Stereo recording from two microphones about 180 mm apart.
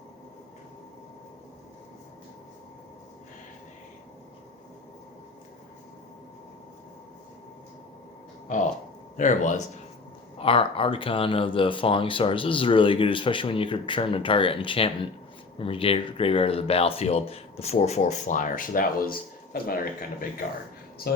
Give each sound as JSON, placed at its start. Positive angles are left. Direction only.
{"t": 9.1, "sound": "speech", "side_deg": 45}
{"t": 10.3, "sound": "speech", "side_deg": 30}